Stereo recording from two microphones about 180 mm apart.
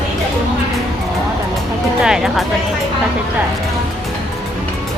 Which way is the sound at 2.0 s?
5° right (ahead or behind).